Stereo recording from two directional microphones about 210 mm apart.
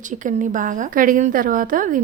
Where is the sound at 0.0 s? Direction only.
40° right (ahead or behind).